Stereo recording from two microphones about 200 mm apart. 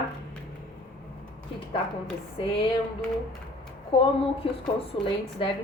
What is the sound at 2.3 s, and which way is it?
Speech, 25° left (ahead or behind).